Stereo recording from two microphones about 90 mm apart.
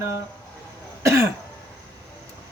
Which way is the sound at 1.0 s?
30° right (ahead or behind).